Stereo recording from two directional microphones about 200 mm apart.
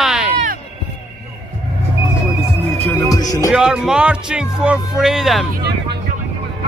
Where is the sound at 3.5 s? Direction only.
5° right (ahead or behind).